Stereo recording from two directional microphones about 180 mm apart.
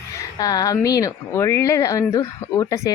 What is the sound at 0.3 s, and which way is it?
A woman's voice, 20° left (ahead or behind).